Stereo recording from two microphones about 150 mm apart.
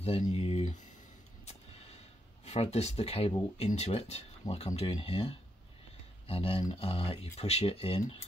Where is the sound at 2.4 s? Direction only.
45° left (ahead or behind).